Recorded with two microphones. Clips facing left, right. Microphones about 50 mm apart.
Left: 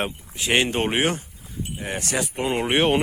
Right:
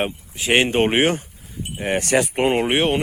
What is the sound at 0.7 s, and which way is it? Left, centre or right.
Speech, right.